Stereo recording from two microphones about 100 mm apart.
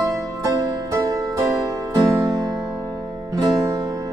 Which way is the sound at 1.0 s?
35° right (ahead or behind).